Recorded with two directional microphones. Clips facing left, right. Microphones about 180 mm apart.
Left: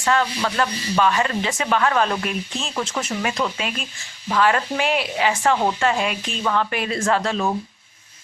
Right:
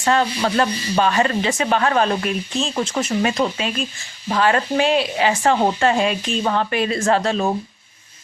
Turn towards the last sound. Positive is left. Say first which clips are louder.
# right 3 dB
turn(degrees=-30)  # may be behind; listen again after turning